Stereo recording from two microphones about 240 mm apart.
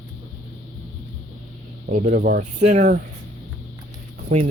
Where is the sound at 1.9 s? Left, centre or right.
Right.